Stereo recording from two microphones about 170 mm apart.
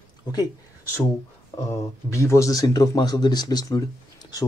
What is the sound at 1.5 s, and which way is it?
Speech, 20° left (ahead or behind).